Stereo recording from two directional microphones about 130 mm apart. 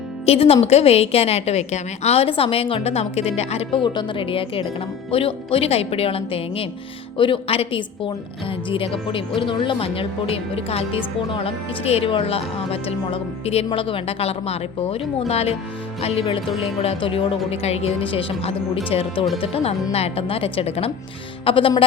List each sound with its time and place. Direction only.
0.3 s speech: 50° left (ahead or behind)
3.8 s a woman's voice: 40° left (ahead or behind)